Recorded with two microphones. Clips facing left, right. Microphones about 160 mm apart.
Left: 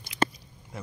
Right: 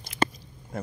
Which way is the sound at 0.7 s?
50° right (ahead or behind).